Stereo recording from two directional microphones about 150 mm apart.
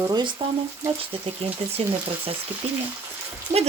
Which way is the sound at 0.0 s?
25° right (ahead or behind).